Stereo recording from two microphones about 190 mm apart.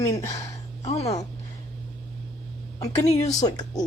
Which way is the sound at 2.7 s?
20° left (ahead or behind).